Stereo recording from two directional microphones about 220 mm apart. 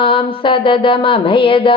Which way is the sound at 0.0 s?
25° left (ahead or behind).